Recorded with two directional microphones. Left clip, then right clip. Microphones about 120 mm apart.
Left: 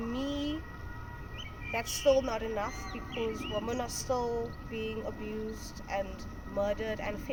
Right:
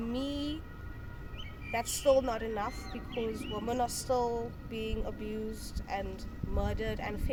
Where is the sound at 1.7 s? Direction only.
25° right (ahead or behind).